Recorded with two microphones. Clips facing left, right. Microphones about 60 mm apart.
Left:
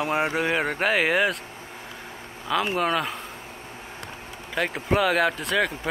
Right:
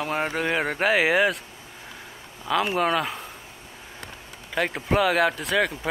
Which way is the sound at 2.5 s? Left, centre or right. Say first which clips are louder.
Right 1 dB; centre.